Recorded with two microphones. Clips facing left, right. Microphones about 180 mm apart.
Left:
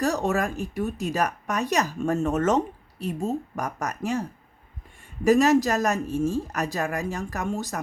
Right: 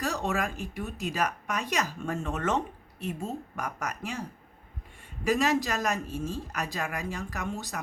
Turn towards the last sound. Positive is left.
turn(degrees=45)  # may be behind; listen again after turning